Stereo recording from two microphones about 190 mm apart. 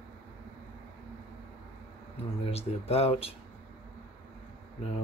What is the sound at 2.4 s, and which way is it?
Speech, 30° left (ahead or behind).